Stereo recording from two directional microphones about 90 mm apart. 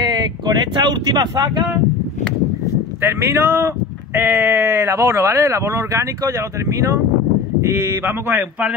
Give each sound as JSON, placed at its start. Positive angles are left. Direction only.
{"t": 0.7, "sound": "speech", "side_deg": -55}
{"t": 3.0, "sound": "speech", "side_deg": -30}
{"t": 7.6, "sound": "speech", "side_deg": -30}